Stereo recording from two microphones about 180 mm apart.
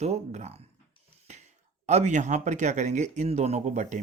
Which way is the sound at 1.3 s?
40° right (ahead or behind).